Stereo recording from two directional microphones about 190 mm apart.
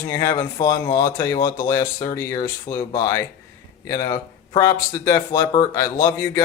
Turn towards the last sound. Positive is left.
turn(degrees=15)  # may be behind; listen again after turning